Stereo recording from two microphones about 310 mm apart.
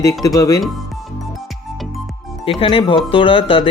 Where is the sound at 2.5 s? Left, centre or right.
Centre.